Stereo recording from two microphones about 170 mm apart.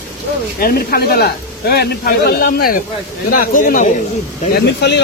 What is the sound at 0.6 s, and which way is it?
Speech, 60° left (ahead or behind).